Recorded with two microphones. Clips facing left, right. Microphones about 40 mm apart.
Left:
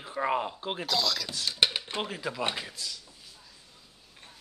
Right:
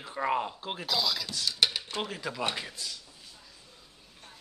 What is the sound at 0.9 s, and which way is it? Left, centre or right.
Speech, centre.